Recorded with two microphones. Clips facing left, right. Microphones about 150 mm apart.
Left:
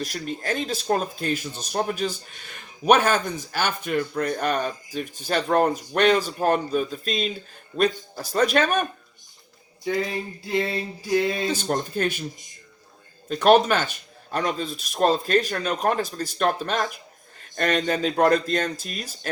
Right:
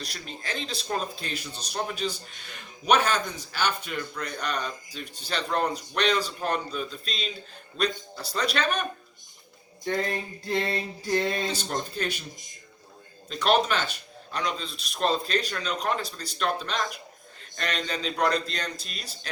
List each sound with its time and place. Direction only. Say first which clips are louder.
0.0 s speech: left 9 dB; 45° left (ahead or behind)
9.8 s male singing: left 3 dB; 5° left (ahead or behind)
11.4 s speech: left 5 dB; 50° left (ahead or behind)
13.2 s speech: left 7 dB; 50° left (ahead or behind)